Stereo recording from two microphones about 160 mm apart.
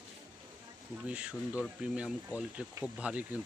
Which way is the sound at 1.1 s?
10° right (ahead or behind).